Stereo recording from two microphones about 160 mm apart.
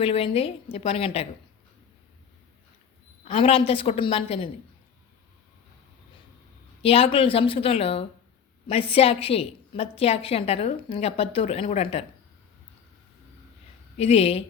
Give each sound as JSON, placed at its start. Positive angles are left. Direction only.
{"t": 0.0, "sound": "a woman's voice", "side_deg": 35}
{"t": 3.2, "sound": "a woman's voice", "side_deg": 40}
{"t": 6.8, "sound": "a woman's voice", "side_deg": 35}
{"t": 13.9, "sound": "a woman's voice", "side_deg": 40}